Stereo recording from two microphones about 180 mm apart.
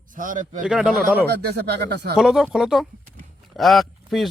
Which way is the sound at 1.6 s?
65° right (ahead or behind).